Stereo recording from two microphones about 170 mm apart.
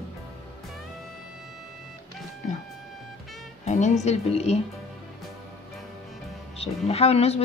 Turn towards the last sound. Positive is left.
turn(degrees=40)  # may be behind; listen again after turning